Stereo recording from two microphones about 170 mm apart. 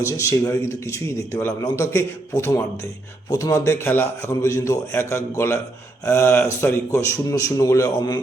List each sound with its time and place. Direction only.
0.0 s a man's voice: 15° left (ahead or behind)